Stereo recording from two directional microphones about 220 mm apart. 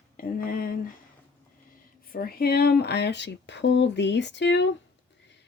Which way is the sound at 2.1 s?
45° left (ahead or behind).